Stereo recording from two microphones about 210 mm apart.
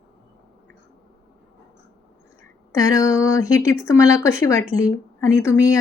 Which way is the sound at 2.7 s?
15° left (ahead or behind).